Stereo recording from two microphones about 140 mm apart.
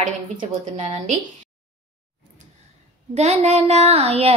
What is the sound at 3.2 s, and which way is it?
A woman's voice, 50° right (ahead or behind).